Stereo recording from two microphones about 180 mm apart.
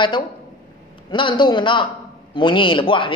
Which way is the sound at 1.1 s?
25° left (ahead or behind).